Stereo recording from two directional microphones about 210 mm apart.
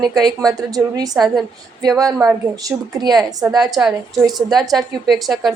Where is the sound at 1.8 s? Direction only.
15° right (ahead or behind).